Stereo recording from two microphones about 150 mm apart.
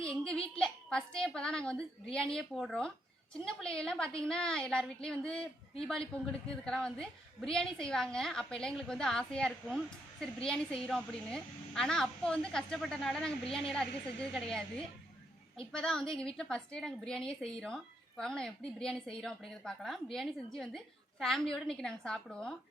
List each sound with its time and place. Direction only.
0.1 s a woman's voice: 5° left (ahead or behind)
15.7 s a woman's voice: 5° left (ahead or behind)